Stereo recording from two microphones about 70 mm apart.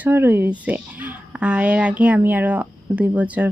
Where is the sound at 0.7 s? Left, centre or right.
Centre.